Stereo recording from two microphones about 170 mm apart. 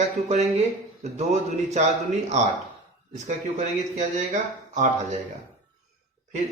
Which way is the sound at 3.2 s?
45° right (ahead or behind).